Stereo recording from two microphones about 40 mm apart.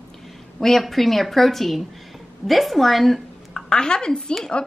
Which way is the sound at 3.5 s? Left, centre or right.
Centre.